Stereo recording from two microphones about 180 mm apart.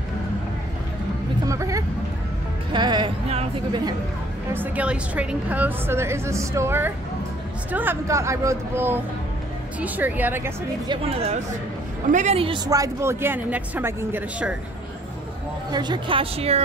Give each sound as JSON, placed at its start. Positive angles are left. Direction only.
{"t": 1.5, "sound": "music", "side_deg": -15}
{"t": 2.7, "sound": "speech", "side_deg": -25}
{"t": 3.3, "sound": "speech", "side_deg": -35}
{"t": 4.5, "sound": "a woman's voice", "side_deg": -10}
{"t": 10.9, "sound": "speech", "side_deg": -35}
{"t": 12.6, "sound": "a woman's voice", "side_deg": -20}
{"t": 15.7, "sound": "a woman's voice", "side_deg": -25}